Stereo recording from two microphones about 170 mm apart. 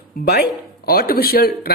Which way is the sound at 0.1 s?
60° left (ahead or behind).